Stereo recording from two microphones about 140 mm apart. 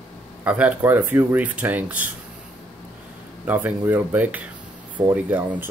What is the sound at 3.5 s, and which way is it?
Speech, 15° right (ahead or behind).